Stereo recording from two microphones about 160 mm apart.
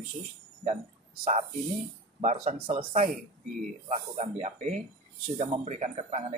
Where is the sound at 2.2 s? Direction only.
45° right (ahead or behind).